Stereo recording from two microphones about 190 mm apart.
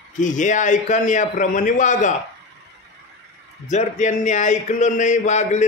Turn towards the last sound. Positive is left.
turn(degrees=40)  # may be behind; listen again after turning